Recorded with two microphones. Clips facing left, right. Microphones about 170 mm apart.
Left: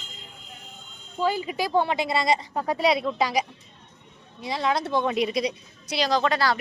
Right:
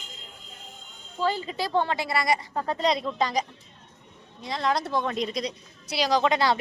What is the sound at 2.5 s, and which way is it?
Speech, 10° left (ahead or behind).